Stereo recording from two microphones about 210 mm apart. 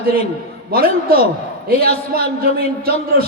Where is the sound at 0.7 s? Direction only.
45° right (ahead or behind).